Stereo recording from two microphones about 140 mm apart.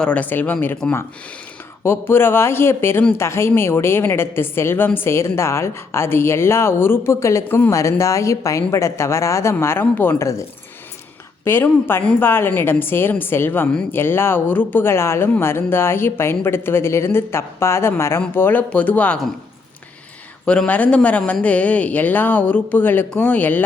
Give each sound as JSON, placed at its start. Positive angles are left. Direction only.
{"t": 0.0, "sound": "a woman's voice", "side_deg": 10}
{"t": 11.4, "sound": "speech", "side_deg": 15}
{"t": 20.4, "sound": "speech", "side_deg": 5}